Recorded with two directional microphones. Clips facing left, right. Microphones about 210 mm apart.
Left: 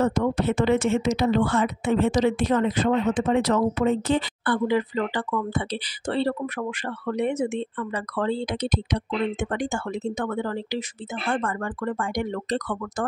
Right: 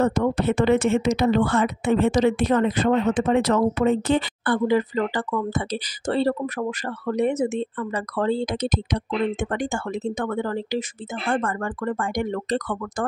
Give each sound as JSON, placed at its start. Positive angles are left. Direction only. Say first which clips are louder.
{"t": 0.0, "sound": "speech", "louder": "right 2 dB", "side_deg": -60}
{"t": 4.6, "sound": "speech", "louder": "right 4 dB", "side_deg": -45}